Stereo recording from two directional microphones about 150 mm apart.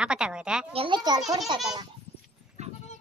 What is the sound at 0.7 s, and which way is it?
Speech, 30° right (ahead or behind).